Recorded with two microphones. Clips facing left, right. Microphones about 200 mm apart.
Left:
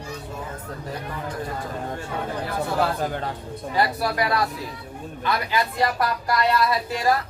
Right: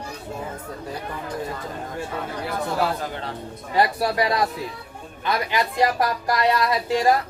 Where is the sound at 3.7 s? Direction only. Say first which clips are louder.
Right 3 dB; 25° right (ahead or behind).